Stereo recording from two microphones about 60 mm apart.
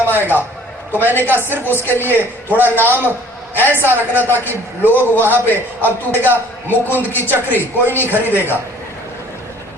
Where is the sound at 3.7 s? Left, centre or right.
Right.